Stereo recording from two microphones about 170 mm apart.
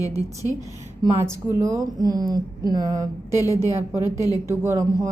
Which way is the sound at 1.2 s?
15° right (ahead or behind).